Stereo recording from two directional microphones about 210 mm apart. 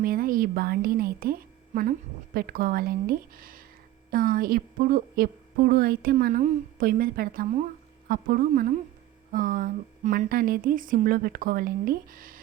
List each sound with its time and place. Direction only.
0.0 s a woman's voice: 45° right (ahead or behind)